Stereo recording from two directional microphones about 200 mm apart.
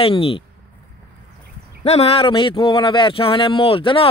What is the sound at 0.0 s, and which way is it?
Speech, 25° left (ahead or behind).